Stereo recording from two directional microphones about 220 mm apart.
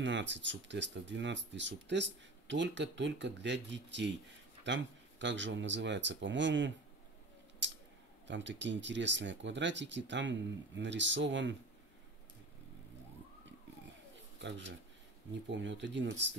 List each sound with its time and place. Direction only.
0.0 s speech: 55° right (ahead or behind)
7.6 s a sound: 55° right (ahead or behind)
8.3 s speech: 55° right (ahead or behind)
15.5 s speech: 55° right (ahead or behind)